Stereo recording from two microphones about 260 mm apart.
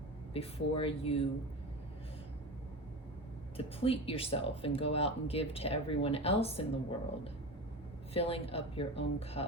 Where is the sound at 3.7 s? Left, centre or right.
Left.